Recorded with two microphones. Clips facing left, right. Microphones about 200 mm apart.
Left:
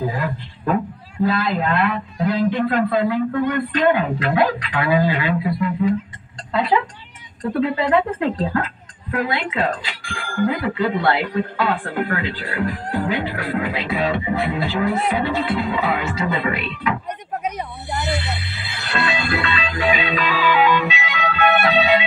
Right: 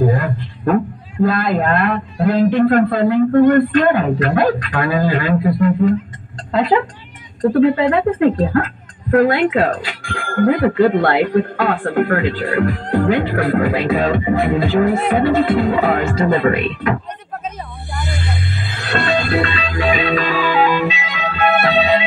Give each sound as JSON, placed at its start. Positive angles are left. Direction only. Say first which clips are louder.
{"t": 1.2, "sound": "speech", "louder": "right 4 dB", "side_deg": -50}
{"t": 18.7, "sound": "music", "louder": "right 4 dB", "side_deg": -50}